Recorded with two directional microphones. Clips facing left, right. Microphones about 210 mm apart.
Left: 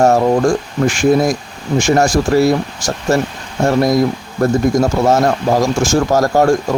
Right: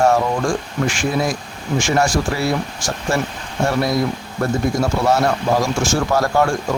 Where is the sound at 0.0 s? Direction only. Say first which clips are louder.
Left 5 dB; 40° left (ahead or behind).